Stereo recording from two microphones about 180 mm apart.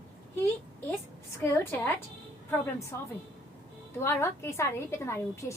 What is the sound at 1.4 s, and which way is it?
Speech, 10° left (ahead or behind).